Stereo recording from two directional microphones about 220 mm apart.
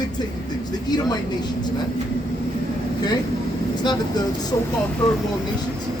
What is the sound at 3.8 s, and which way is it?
Speech, 20° left (ahead or behind).